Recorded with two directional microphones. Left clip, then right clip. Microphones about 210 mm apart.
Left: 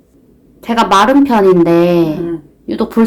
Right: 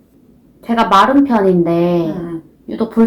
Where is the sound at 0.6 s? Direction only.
55° left (ahead or behind).